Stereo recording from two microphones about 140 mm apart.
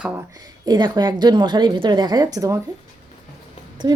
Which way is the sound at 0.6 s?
30° right (ahead or behind).